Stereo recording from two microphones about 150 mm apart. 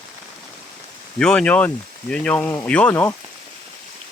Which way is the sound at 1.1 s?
5° left (ahead or behind).